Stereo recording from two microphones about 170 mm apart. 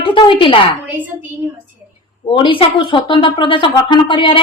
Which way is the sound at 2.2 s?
30° left (ahead or behind).